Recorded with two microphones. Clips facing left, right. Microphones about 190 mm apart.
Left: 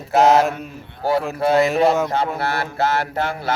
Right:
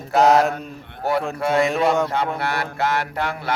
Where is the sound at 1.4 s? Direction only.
30° left (ahead or behind).